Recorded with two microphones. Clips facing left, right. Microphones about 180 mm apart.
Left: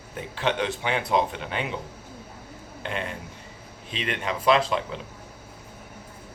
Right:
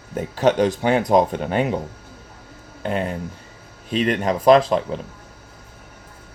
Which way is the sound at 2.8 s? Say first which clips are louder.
Right 8 dB; 40° right (ahead or behind).